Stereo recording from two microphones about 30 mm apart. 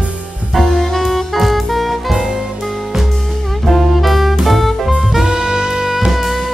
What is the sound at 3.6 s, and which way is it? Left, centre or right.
Music, centre.